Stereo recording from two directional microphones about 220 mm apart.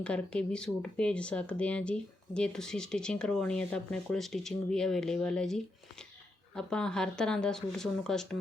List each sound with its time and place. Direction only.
0.0 s speech: 5° left (ahead or behind)
6.6 s speech: 5° left (ahead or behind)